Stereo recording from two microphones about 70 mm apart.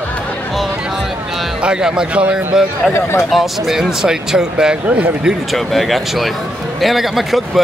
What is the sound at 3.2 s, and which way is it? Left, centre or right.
Speech, centre.